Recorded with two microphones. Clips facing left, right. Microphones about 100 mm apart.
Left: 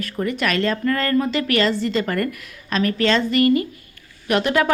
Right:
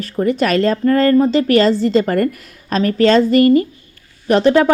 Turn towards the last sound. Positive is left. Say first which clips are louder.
# right 7 dB
turn(degrees=-30)  # may be behind; listen again after turning